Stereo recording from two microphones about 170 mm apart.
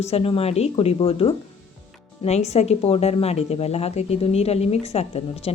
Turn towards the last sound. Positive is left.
turn(degrees=40)  # may be behind; listen again after turning